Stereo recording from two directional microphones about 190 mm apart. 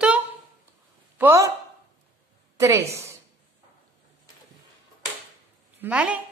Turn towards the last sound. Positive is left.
turn(degrees=-5)  # may be behind; listen again after turning